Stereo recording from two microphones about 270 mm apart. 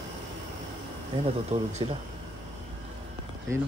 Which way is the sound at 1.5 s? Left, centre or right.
Right.